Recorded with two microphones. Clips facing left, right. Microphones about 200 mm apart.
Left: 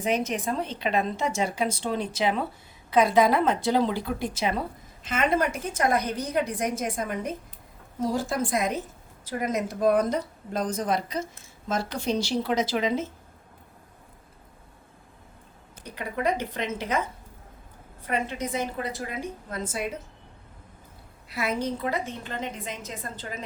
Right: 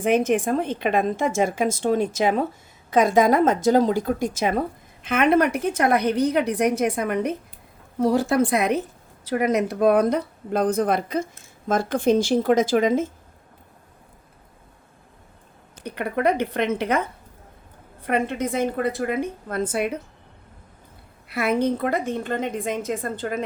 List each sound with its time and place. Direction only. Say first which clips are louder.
0.0 s a woman's voice: right 7 dB; 55° right (ahead or behind)
5.0 s a woman's voice: right 6 dB; 60° right (ahead or behind)
15.8 s a woman's voice: right 6 dB; 60° right (ahead or behind)
21.2 s a woman's voice: right 7 dB; 60° right (ahead or behind)